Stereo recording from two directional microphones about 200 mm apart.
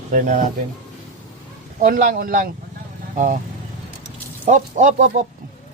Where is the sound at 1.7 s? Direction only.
40° right (ahead or behind).